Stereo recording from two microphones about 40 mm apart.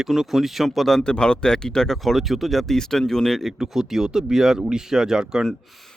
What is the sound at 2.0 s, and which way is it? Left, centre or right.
Speech, centre.